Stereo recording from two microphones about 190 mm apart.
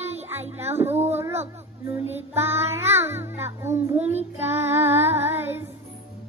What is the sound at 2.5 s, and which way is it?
Child singing, 35° right (ahead or behind).